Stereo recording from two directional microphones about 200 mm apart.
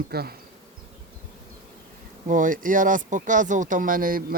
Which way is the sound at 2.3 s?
40° right (ahead or behind).